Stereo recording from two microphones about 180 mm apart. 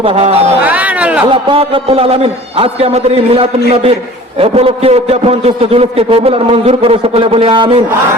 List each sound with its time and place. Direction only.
0.0 s a man's voice: 30° right (ahead or behind)
0.6 s a sound: 10° right (ahead or behind)
1.3 s a man's voice: 30° right (ahead or behind)